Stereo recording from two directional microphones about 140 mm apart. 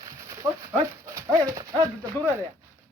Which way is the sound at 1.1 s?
25° right (ahead or behind).